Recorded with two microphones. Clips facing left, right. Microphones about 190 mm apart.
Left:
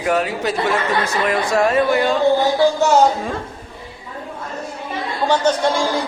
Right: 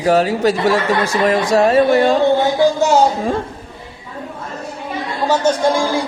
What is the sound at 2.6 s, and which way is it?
Speech, 15° right (ahead or behind).